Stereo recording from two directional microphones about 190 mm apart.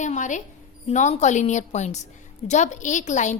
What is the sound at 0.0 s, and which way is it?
A woman's voice, 40° left (ahead or behind).